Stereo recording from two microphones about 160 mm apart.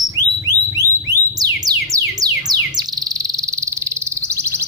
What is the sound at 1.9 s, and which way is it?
Music, 25° right (ahead or behind).